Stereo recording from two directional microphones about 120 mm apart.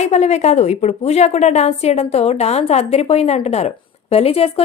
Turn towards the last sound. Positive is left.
turn(degrees=55)  # may be behind; listen again after turning